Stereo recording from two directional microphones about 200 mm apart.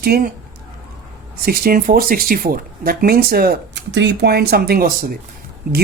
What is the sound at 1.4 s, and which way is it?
Speech, 45° right (ahead or behind).